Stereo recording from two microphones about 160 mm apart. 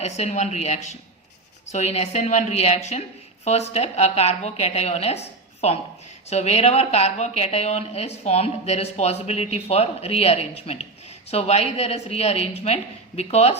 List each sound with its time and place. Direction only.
0.0 s a woman's voice: 45° left (ahead or behind)